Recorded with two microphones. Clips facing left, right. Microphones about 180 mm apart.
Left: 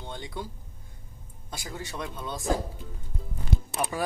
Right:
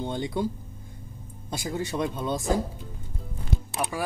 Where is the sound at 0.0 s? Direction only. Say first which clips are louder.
Right 9 dB; 20° right (ahead or behind).